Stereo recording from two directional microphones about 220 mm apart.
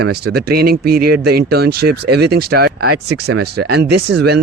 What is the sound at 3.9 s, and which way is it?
Speech, 50° right (ahead or behind).